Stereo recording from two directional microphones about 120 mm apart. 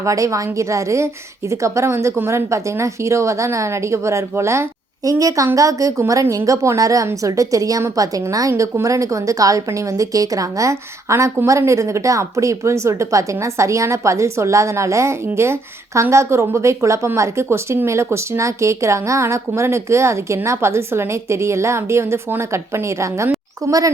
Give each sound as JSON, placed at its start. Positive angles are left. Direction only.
{"t": 0.0, "sound": "a woman's voice", "side_deg": -25}